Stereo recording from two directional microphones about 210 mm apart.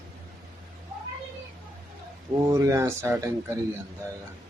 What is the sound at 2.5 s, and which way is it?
Speech, 10° right (ahead or behind).